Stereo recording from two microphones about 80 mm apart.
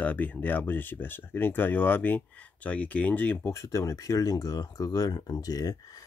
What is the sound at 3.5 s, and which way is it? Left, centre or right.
Speech, left.